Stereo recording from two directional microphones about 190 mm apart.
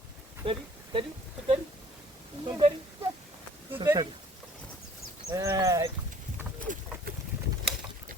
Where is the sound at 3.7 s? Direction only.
15° right (ahead or behind).